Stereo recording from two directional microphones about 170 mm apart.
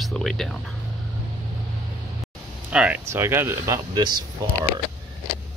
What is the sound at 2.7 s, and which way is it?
Speech, 10° right (ahead or behind).